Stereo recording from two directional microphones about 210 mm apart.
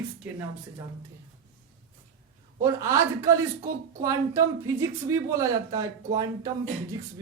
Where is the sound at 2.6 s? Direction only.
15° right (ahead or behind).